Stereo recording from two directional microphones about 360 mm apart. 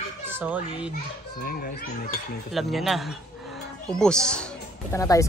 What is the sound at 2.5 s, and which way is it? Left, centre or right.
Speech, centre.